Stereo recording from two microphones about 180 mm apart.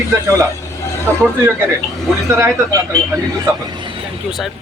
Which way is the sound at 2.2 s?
15° right (ahead or behind).